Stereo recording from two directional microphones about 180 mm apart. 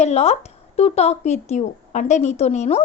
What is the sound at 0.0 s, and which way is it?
Speech, 35° left (ahead or behind).